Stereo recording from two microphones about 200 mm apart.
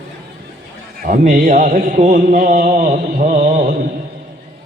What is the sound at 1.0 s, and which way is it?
Mantra, 45° right (ahead or behind).